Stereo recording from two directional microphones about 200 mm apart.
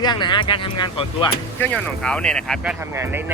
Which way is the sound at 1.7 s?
5° left (ahead or behind).